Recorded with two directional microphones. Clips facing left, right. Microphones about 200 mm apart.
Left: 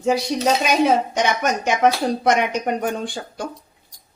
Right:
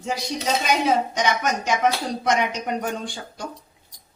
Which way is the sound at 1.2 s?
60° left (ahead or behind).